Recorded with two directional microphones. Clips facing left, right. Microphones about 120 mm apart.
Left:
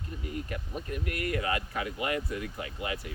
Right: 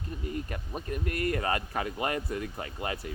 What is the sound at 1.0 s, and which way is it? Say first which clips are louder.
Speech: right 2 dB; 40° right (ahead or behind).